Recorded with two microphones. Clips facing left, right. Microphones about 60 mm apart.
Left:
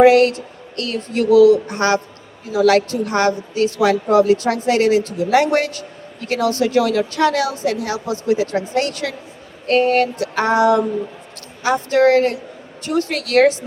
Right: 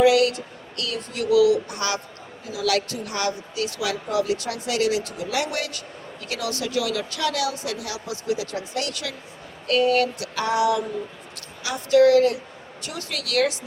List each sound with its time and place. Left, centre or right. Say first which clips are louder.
0.0 s a woman's voice: left 7 dB; left